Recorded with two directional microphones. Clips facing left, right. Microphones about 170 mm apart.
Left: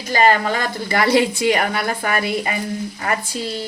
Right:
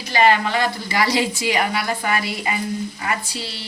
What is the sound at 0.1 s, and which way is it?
A woman's voice, 45° left (ahead or behind).